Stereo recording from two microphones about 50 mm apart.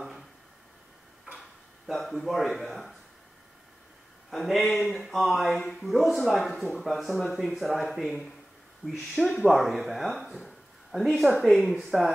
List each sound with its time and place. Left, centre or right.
2.0 s speech: centre
4.3 s speech: centre